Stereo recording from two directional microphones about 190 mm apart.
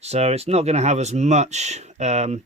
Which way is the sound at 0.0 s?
35° right (ahead or behind).